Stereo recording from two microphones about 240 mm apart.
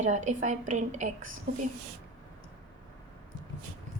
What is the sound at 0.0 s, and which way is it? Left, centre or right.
A woman's voice, right.